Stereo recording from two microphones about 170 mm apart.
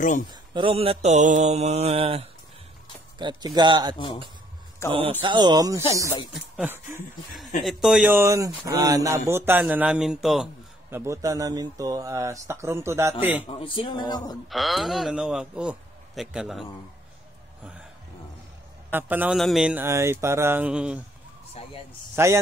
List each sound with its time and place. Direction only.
0.3 s mantra: 30° right (ahead or behind)
3.2 s speech: 25° right (ahead or behind)
4.8 s speech: 15° left (ahead or behind)
5.2 s a man's voice: 25° right (ahead or behind); by 8.1 s centre (ahead or behind)
8.1 s speech: 15° right (ahead or behind)
10.9 s speech: 15° right (ahead or behind)
13.6 s speech: 30° left (ahead or behind)
14.5 s a man's voice: centre (ahead or behind)
18.9 s a man's voice: 10° right (ahead or behind)
22.1 s speech: 15° right (ahead or behind)